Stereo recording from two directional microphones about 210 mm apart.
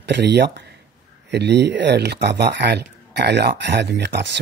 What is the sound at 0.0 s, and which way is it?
Speech, 55° right (ahead or behind).